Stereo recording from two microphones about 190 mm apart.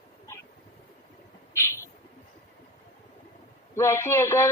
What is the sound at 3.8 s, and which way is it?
Speech, 15° left (ahead or behind).